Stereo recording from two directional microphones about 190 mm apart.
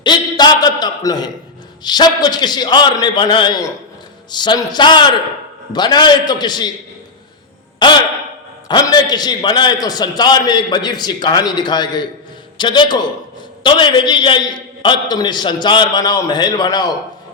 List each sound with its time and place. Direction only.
0.0 s a man's voice: 25° left (ahead or behind)
7.8 s a man's voice: 25° left (ahead or behind)